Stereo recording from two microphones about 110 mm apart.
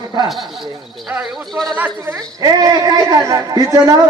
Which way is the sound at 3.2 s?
35° right (ahead or behind).